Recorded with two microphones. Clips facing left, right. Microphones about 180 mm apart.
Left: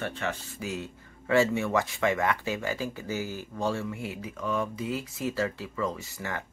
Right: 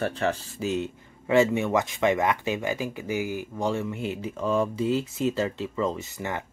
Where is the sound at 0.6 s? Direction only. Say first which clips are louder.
Right 7 dB; 20° right (ahead or behind).